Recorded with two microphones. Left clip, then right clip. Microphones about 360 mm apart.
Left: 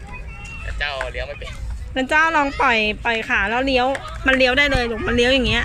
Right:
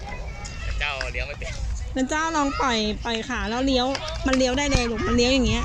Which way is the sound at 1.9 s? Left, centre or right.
Left.